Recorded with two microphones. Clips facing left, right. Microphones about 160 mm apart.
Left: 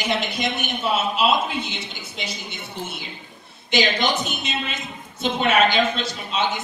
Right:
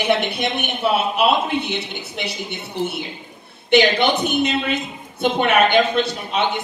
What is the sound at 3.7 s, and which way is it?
A woman's voice, 60° right (ahead or behind).